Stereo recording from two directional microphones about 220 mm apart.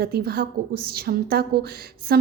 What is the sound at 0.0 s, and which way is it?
A woman's voice, 45° right (ahead or behind).